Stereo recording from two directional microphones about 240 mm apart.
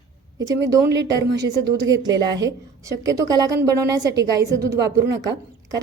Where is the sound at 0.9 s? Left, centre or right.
Right.